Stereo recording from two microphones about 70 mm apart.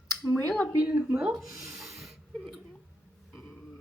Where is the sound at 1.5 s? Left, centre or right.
Right.